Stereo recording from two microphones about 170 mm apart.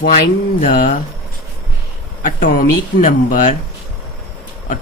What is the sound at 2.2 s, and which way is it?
Speech, 55° left (ahead or behind).